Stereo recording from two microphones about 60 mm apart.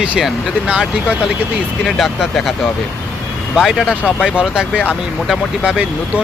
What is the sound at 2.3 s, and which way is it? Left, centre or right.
Speech, centre.